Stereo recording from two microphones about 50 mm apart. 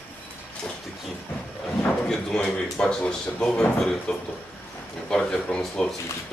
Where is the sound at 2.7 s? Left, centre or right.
Centre.